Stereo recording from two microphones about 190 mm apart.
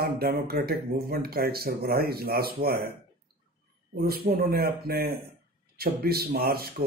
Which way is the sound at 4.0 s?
55° right (ahead or behind).